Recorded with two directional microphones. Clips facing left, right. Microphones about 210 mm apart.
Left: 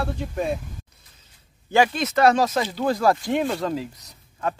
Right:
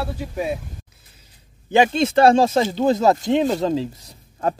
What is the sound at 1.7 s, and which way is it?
Speech, 25° right (ahead or behind).